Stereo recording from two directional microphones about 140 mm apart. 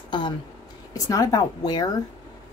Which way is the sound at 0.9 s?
25° left (ahead or behind).